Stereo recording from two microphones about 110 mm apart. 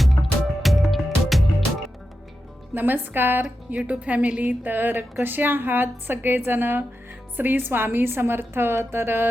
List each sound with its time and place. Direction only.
0.0 s music: centre (ahead or behind)
2.7 s a woman's voice: 15° right (ahead or behind)